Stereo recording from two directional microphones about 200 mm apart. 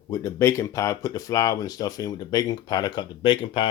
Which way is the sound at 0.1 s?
15° left (ahead or behind).